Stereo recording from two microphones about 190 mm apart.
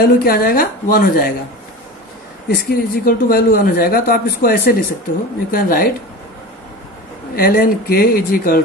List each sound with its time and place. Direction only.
0.0 s speech: 55° left (ahead or behind)
2.5 s speech: 50° left (ahead or behind)
7.3 s speech: 55° left (ahead or behind)